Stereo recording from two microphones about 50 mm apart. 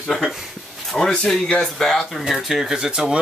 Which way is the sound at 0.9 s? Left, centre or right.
Centre.